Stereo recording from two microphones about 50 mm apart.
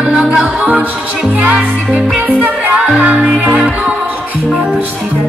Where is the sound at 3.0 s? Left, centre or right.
Right.